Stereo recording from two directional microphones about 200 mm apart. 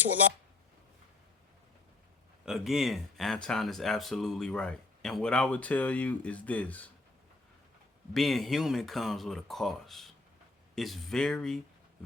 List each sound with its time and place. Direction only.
2.4 s speech: centre (ahead or behind)
8.1 s speech: centre (ahead or behind)